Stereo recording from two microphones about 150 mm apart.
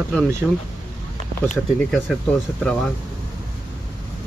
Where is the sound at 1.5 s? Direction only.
10° left (ahead or behind).